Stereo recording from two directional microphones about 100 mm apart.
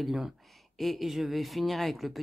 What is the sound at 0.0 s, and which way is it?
Speech, centre (ahead or behind).